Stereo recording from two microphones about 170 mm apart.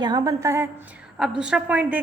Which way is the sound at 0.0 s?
25° right (ahead or behind).